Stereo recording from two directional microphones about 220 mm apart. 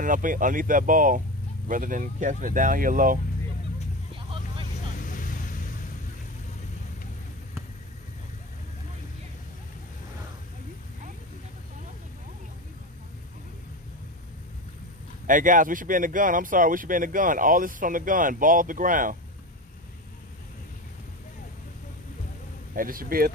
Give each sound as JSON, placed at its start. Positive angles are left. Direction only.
{"t": 0.0, "sound": "speech", "side_deg": -35}
{"t": 4.1, "sound": "vehicle", "side_deg": -25}
{"t": 4.9, "sound": "vehicle", "side_deg": 35}
{"t": 15.2, "sound": "speech", "side_deg": -35}
{"t": 22.8, "sound": "speech", "side_deg": -40}